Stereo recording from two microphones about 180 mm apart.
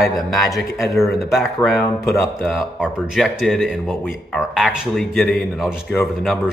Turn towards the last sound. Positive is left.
turn(degrees=0)  # may be behind; listen again after turning